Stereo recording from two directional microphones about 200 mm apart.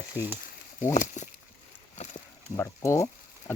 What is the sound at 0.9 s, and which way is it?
Speech, 35° left (ahead or behind).